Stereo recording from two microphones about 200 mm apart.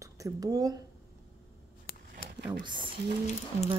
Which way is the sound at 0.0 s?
15° right (ahead or behind).